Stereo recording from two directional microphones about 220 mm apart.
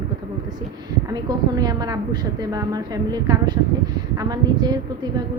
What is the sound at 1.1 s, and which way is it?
A woman's voice, 20° right (ahead or behind).